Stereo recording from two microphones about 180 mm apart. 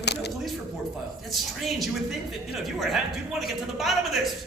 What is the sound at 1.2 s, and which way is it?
A man's voice, centre (ahead or behind).